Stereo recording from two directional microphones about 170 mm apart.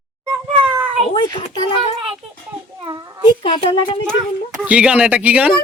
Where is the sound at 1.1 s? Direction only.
25° left (ahead or behind).